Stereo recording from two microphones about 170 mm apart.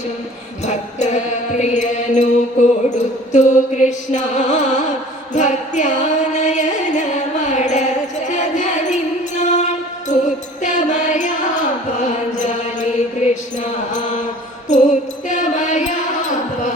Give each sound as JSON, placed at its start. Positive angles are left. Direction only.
{"t": 0.6, "sound": "music", "side_deg": 45}
{"t": 3.3, "sound": "mantra", "side_deg": 45}
{"t": 14.7, "sound": "music", "side_deg": 45}